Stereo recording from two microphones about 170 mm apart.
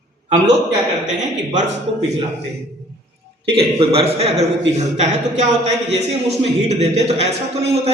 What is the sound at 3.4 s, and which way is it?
A man's voice, 35° right (ahead or behind).